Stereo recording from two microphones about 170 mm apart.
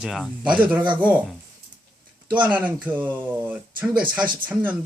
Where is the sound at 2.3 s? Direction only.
10° right (ahead or behind).